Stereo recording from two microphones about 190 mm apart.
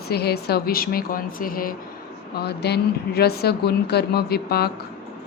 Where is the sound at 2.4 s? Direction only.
60° left (ahead or behind).